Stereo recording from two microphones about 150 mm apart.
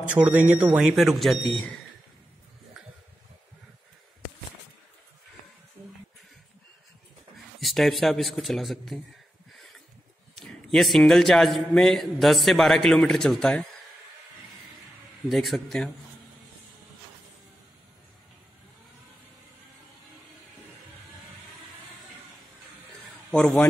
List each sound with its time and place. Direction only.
0.1 s speech: 10° right (ahead or behind)
7.6 s a man's voice: centre (ahead or behind)
10.4 s a man's voice: centre (ahead or behind)
15.2 s a man's voice: centre (ahead or behind)
23.3 s a man's voice: 10° left (ahead or behind)